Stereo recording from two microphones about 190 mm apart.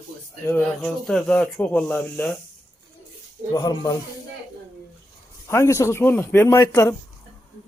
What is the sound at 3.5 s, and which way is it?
Speech, 20° left (ahead or behind).